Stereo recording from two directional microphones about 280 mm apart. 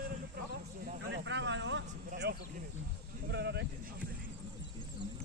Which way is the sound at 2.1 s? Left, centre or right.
Right.